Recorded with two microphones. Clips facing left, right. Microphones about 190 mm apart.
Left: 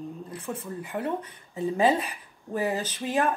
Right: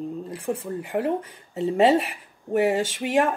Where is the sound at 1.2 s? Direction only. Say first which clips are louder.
Right 4 dB; 25° right (ahead or behind).